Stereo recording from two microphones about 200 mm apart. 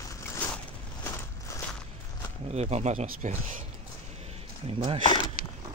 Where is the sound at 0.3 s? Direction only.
10° left (ahead or behind).